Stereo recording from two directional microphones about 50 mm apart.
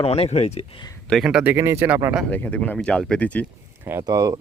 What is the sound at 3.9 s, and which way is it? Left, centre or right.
Speech, right.